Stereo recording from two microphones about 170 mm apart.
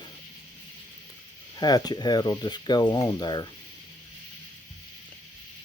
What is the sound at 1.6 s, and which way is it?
Speech, 25° left (ahead or behind).